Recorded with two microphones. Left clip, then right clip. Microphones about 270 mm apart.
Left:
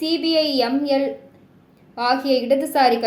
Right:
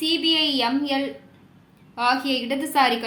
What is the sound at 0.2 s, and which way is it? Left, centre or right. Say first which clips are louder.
A woman's voice: left 2 dB; centre.